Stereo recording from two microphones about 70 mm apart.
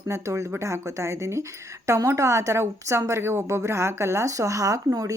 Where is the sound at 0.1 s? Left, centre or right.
Right.